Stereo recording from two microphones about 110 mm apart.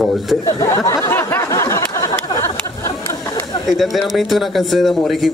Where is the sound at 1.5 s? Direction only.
25° left (ahead or behind).